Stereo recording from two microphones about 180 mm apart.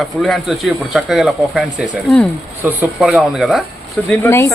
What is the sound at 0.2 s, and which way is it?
Speech, centre (ahead or behind).